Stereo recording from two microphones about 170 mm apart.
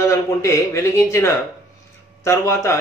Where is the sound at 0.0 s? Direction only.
15° left (ahead or behind).